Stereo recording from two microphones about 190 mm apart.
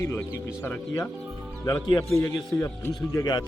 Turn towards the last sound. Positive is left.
turn(degrees=20)  # may be behind; listen again after turning